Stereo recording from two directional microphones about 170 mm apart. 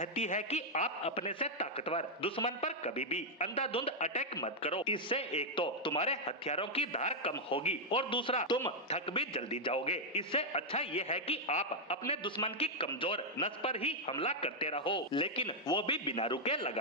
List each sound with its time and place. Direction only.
0.0 s a man's voice: 45° left (ahead or behind)
4.4 s a man's voice: 35° left (ahead or behind)